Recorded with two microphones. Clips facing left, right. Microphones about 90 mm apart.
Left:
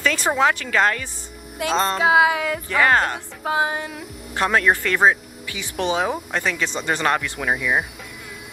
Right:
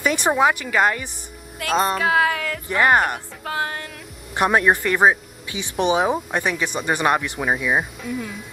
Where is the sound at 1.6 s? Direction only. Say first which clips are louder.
Even; 20° left (ahead or behind).